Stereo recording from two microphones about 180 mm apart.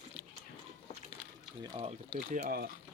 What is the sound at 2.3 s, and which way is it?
Speech, 60° right (ahead or behind).